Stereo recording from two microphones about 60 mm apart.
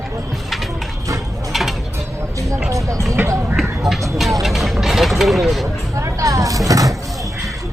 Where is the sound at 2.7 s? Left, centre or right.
Right.